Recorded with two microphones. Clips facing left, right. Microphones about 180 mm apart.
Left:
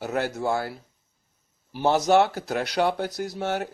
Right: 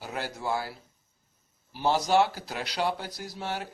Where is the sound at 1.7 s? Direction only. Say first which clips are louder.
Left 4 dB; 55° left (ahead or behind).